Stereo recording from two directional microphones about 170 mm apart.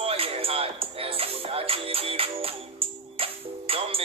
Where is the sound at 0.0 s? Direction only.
35° right (ahead or behind).